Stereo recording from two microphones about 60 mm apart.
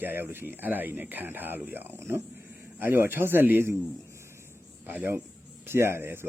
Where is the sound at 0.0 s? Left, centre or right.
Right.